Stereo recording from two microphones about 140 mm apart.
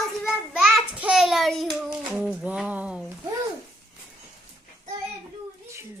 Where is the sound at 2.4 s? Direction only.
10° right (ahead or behind).